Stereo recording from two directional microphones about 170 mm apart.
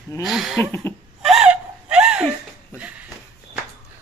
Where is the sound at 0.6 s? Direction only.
10° left (ahead or behind).